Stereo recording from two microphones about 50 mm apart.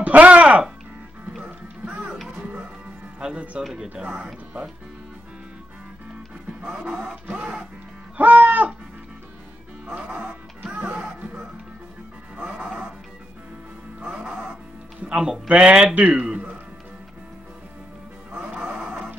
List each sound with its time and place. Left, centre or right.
0.0 s music: right
2.3 s music: right
3.6 s speech: centre
6.7 s speech: centre
8.2 s livestock: right
9.8 s music: right
14.1 s speech: right
18.5 s music: right